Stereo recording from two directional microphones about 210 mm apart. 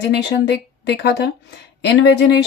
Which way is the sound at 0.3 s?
55° left (ahead or behind).